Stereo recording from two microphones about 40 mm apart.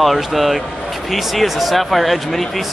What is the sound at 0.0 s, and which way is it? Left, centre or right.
Speech, centre.